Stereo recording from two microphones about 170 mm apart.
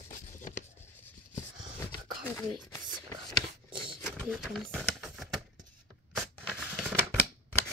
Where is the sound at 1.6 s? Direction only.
30° right (ahead or behind).